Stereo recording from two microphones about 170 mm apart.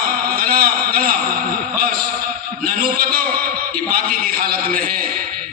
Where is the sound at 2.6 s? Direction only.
55° right (ahead or behind).